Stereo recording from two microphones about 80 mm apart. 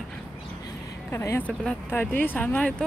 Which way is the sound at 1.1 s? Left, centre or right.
Left.